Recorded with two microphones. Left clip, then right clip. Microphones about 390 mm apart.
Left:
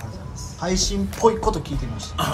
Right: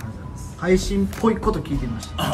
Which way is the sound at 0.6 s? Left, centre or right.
Centre.